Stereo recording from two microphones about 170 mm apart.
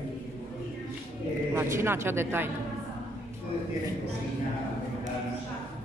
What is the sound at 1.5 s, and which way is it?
Speech, 15° right (ahead or behind).